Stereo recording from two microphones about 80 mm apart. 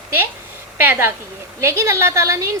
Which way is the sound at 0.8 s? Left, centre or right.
Right.